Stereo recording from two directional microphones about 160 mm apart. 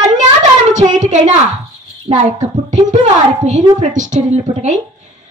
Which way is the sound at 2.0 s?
50° right (ahead or behind).